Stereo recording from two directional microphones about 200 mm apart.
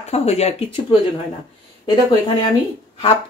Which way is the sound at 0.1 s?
30° left (ahead or behind).